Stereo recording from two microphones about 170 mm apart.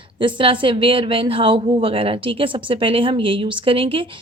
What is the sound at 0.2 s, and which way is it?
A woman's voice, 30° right (ahead or behind).